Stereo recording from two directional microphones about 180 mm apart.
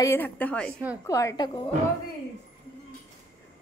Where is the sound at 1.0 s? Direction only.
15° left (ahead or behind).